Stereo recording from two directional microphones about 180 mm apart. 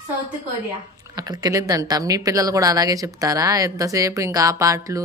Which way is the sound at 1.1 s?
20° right (ahead or behind).